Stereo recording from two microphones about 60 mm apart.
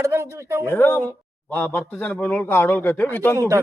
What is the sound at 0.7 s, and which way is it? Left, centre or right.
Speech, left.